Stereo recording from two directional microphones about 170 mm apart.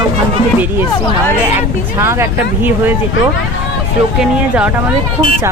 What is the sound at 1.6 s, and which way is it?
Speech, 15° right (ahead or behind).